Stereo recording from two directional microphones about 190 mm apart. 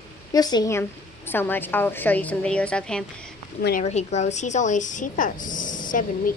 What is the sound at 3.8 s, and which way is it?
Speech, 35° left (ahead or behind).